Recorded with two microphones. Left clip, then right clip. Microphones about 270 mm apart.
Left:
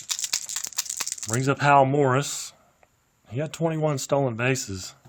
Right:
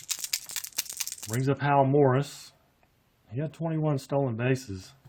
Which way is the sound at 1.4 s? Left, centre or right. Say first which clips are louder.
Left 6 dB; left.